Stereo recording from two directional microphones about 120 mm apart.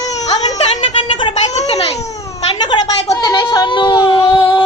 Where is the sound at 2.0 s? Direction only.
25° left (ahead or behind).